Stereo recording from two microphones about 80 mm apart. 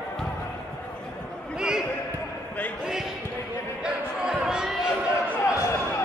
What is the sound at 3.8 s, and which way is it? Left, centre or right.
Basketball bounce, centre.